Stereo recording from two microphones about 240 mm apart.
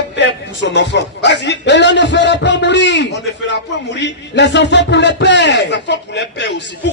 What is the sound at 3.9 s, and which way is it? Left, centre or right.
A man's voice, left.